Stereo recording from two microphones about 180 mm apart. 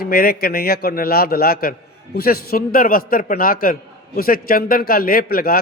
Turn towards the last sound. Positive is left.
turn(degrees=55)  # may be behind; listen again after turning